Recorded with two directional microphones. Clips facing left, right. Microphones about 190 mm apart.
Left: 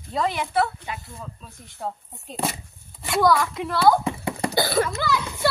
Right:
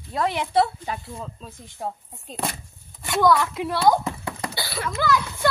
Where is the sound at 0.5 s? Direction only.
30° right (ahead or behind).